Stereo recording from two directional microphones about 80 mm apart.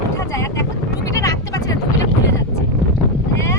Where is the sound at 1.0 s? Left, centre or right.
Left.